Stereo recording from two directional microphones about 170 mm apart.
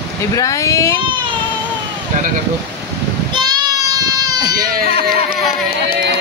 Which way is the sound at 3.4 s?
25° right (ahead or behind).